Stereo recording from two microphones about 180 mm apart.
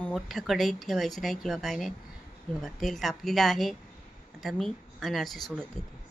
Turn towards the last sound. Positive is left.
turn(degrees=0)  # may be behind; listen again after turning